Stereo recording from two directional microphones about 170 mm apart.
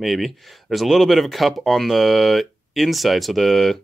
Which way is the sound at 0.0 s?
Centre (ahead or behind).